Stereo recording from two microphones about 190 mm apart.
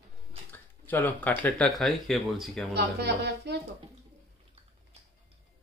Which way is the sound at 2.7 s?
60° right (ahead or behind).